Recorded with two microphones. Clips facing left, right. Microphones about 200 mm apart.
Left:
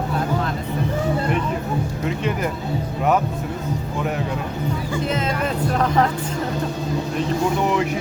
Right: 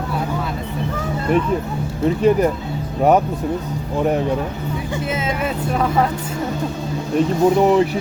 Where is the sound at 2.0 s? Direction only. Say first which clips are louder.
Right 11 dB; 35° right (ahead or behind).